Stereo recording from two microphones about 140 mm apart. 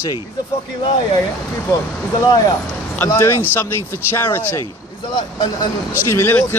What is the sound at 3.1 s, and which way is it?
A man's voice, 20° left (ahead or behind).